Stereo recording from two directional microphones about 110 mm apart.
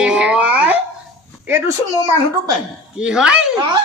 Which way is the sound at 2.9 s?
5° right (ahead or behind).